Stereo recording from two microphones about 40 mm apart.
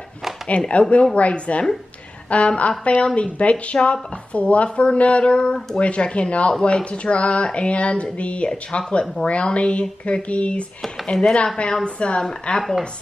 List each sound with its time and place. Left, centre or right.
0.5 s speech: left
12.2 s a woman's voice: centre